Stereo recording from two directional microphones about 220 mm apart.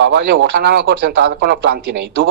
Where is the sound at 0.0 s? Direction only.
50° right (ahead or behind).